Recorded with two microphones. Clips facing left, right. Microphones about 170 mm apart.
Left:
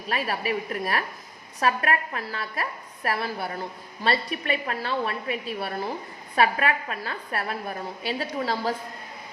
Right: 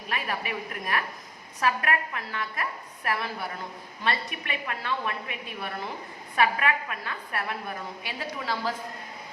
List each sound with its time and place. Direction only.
0.1 s a woman's voice: 35° left (ahead or behind)